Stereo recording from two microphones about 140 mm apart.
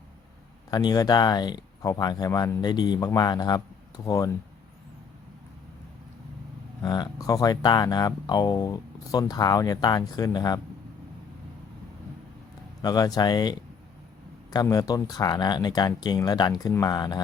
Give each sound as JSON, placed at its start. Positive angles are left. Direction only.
{"t": 0.7, "sound": "speech", "side_deg": 30}
{"t": 6.8, "sound": "speech", "side_deg": 25}
{"t": 12.8, "sound": "speech", "side_deg": 25}